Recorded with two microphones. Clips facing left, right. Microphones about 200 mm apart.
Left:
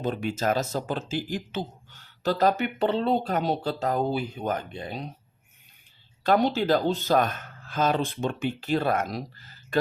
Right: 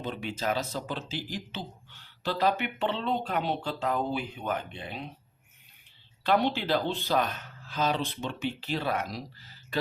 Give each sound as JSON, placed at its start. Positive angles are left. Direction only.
{"t": 0.0, "sound": "speech", "side_deg": 45}
{"t": 6.2, "sound": "speech", "side_deg": 45}